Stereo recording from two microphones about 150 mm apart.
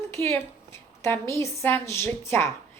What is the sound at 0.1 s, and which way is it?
A woman's voice, 15° left (ahead or behind).